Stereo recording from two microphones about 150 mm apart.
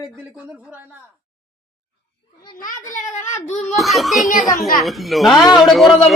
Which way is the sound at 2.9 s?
55° left (ahead or behind).